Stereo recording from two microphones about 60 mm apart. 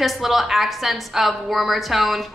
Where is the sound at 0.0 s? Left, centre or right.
Centre.